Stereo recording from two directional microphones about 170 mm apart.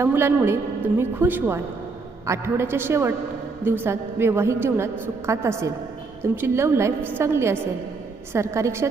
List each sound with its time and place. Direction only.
0.0 s a woman's voice: 15° right (ahead or behind)